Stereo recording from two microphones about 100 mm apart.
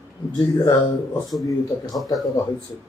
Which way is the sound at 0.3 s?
40° left (ahead or behind).